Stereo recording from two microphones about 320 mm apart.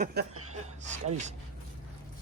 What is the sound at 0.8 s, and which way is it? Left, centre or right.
Speech, right.